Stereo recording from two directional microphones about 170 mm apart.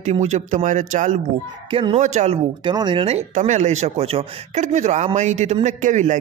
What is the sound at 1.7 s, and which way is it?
Speech, 30° right (ahead or behind).